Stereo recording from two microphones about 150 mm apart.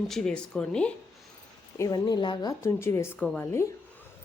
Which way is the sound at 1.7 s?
25° left (ahead or behind).